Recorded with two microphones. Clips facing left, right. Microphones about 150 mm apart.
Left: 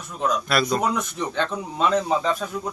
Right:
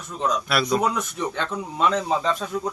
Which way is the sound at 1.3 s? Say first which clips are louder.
Left 2 dB; 15° left (ahead or behind).